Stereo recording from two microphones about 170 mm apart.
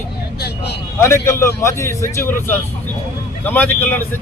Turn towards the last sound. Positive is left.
turn(degrees=10)  # may be behind; listen again after turning